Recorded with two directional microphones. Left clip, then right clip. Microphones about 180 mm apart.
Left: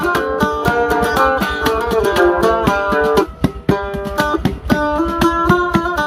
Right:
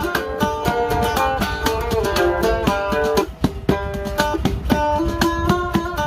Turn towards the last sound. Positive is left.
turn(degrees=40)  # may be behind; listen again after turning